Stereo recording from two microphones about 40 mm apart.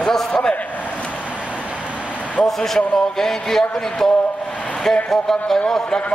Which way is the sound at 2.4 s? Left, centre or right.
Centre.